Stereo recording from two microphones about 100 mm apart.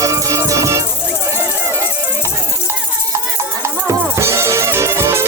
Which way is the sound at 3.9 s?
30° right (ahead or behind).